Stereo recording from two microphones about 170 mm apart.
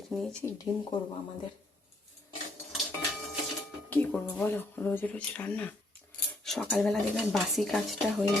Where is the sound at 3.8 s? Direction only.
10° left (ahead or behind).